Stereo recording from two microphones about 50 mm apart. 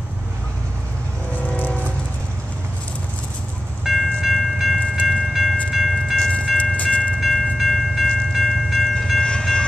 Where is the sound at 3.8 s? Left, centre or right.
Centre.